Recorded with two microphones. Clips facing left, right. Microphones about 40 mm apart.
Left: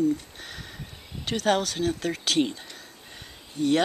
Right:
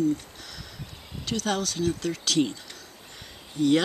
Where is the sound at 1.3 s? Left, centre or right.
Centre.